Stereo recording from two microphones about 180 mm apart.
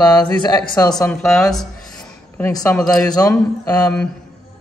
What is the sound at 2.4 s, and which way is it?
Speech, 15° left (ahead or behind).